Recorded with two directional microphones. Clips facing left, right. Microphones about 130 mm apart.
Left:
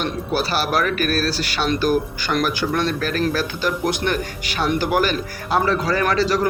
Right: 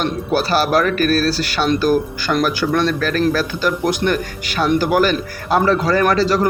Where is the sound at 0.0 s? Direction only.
45° right (ahead or behind).